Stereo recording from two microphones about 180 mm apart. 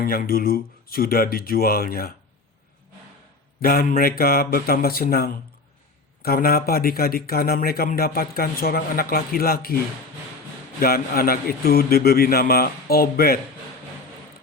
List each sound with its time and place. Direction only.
0.0 s a man's voice: 55° left (ahead or behind)
3.6 s a man's voice: 55° left (ahead or behind)
10.8 s a man's voice: 55° left (ahead or behind)